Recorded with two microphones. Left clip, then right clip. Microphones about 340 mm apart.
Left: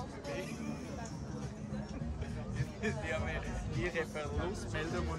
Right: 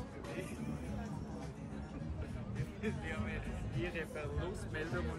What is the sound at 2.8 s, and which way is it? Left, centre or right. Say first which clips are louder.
Music: left 5 dB; centre.